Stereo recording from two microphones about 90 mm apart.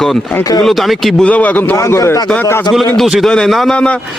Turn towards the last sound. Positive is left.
turn(degrees=15)  # may be behind; listen again after turning